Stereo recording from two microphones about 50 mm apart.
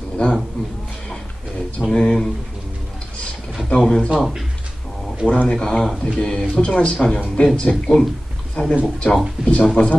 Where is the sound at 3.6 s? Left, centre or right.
Centre.